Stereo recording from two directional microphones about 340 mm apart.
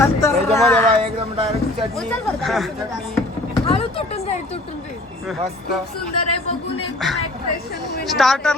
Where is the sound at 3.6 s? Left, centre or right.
Centre.